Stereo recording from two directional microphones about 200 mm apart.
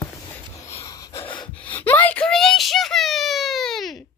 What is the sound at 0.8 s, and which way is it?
Snort, 20° left (ahead or behind).